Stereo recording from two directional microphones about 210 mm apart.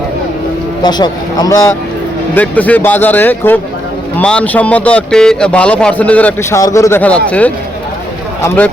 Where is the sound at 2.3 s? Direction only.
5° left (ahead or behind).